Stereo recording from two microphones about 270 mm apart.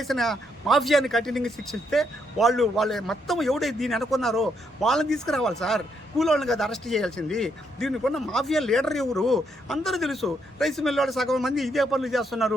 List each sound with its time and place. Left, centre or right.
0.0 s speech: centre